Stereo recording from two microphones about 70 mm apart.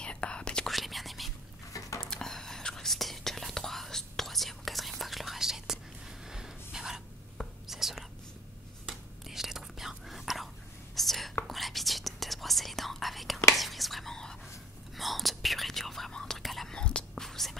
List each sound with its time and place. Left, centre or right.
0.0 s whispering: centre
0.7 s whispering: centre
1.7 s dishes: left
2.0 s whispering: centre
6.2 s gasp: centre
7.6 s whispering: centre